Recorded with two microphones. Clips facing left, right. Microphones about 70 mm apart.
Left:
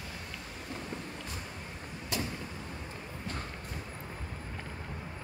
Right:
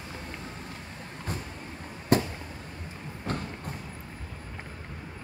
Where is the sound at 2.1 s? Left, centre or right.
Right.